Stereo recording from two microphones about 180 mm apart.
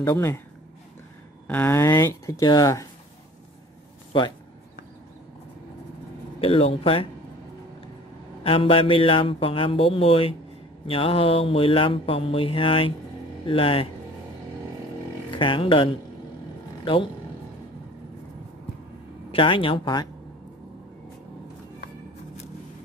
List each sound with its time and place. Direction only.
0.0 s speech: 15° left (ahead or behind)
1.5 s speech: 10° left (ahead or behind)
6.4 s mantra: 30° left (ahead or behind)
8.5 s mantra: 30° left (ahead or behind)
15.3 s speech: 30° left (ahead or behind)
19.3 s speech: 30° left (ahead or behind)